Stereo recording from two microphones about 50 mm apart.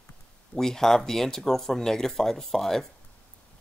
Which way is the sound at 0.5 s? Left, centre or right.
Centre.